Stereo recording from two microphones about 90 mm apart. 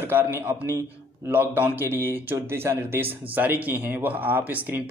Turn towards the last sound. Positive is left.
turn(degrees=-20)  # may be behind; listen again after turning